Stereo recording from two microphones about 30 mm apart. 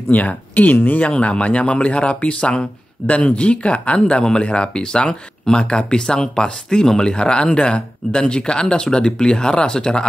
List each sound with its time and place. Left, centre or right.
0.1 s speech: left
1.1 s speech: left
4.2 s speech: left